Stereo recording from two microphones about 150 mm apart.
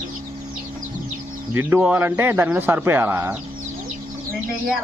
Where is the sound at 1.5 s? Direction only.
15° right (ahead or behind).